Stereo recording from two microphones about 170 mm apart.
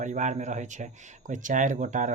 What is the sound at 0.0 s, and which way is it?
Speech, 45° right (ahead or behind).